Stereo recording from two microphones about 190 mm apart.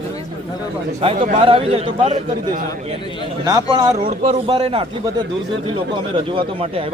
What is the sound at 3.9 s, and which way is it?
Speech, 45° right (ahead or behind).